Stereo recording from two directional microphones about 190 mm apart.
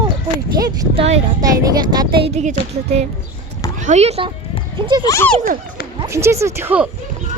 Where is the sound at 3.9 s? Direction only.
35° right (ahead or behind).